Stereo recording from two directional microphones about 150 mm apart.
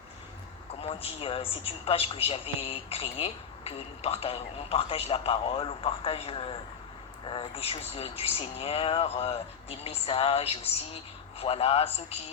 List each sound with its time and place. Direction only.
1.0 s a woman's voice: 40° left (ahead or behind)